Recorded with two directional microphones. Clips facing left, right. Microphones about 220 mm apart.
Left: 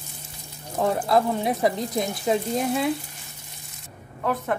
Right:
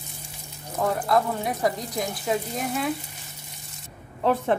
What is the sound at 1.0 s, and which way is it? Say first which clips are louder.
Speech: left 2 dB; 25° left (ahead or behind).